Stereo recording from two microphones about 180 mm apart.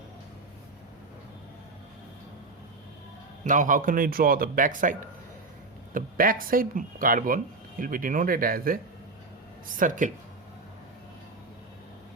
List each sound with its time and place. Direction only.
3.4 s speech: 45° right (ahead or behind)